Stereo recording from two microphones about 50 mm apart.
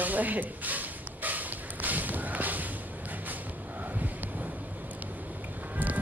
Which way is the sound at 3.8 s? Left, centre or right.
Right.